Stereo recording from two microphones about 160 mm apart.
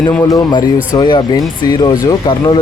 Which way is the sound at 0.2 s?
25° left (ahead or behind).